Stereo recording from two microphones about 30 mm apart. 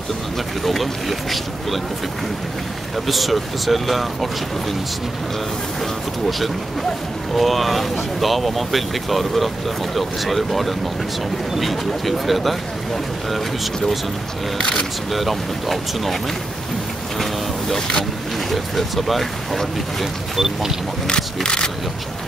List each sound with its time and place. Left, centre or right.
0.7 s speech: centre
3.1 s speech: centre
7.3 s speech: centre
15.1 s speech: centre
17.7 s speech: centre
18.5 s speech: centre
20.3 s speech: centre
21.4 s speech: left